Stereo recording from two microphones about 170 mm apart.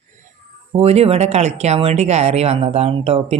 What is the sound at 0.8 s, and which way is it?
Speech, 35° right (ahead or behind).